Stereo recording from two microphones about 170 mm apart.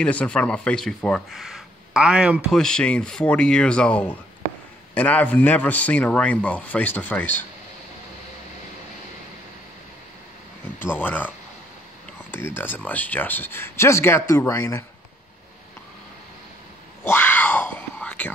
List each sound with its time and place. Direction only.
0.0 s speech: 5° left (ahead or behind)
2.6 s a man's voice: 5° left (ahead or behind)
11.0 s a man's voice: 10° left (ahead or behind)
17.0 s whispering: 10° left (ahead or behind)